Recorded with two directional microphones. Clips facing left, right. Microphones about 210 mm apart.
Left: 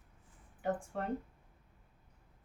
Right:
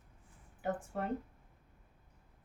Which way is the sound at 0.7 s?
5° right (ahead or behind).